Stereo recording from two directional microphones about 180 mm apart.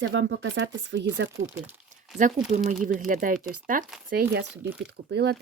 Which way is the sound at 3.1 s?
50° right (ahead or behind).